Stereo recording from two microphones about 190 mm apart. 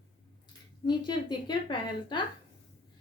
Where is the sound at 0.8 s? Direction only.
25° left (ahead or behind).